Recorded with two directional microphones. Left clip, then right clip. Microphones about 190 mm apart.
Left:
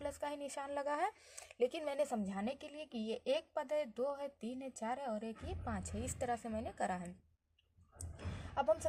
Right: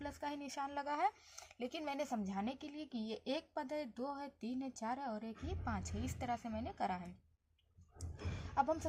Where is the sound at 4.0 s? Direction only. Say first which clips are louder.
Left 5 dB; 50° left (ahead or behind).